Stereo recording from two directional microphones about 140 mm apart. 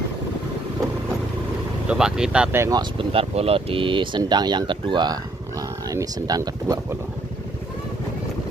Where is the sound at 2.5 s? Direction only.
20° right (ahead or behind).